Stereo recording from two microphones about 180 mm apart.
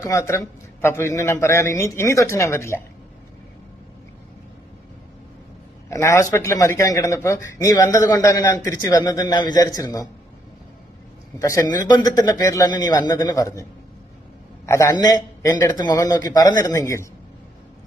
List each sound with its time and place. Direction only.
0.0 s a man's voice: 15° left (ahead or behind)
5.9 s speech: 15° left (ahead or behind)
11.3 s a man's voice: 15° left (ahead or behind)
14.7 s speech: 15° left (ahead or behind)